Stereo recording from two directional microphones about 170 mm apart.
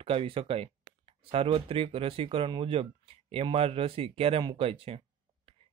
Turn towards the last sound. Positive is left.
turn(degrees=-35)  # may be behind; listen again after turning